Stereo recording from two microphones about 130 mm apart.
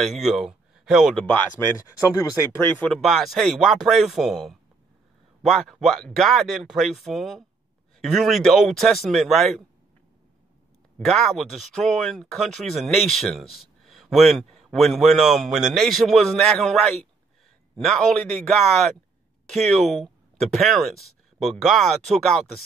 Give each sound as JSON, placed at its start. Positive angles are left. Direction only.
{"t": 0.0, "sound": "speech", "side_deg": 0}
{"t": 1.9, "sound": "speech", "side_deg": 25}
{"t": 2.7, "sound": "speech", "side_deg": 10}
{"t": 11.1, "sound": "speech", "side_deg": 0}